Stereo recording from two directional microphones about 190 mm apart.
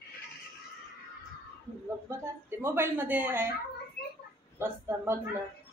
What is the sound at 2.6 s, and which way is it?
Child singing, 10° right (ahead or behind).